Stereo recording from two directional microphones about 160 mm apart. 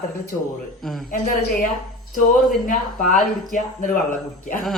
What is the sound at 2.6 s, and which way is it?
Speech, 55° left (ahead or behind).